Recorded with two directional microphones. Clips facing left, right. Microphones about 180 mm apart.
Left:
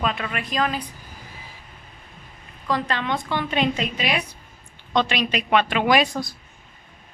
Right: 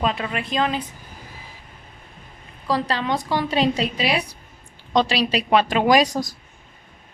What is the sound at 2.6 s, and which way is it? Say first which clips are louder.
Speech: right 2 dB; 35° right (ahead or behind).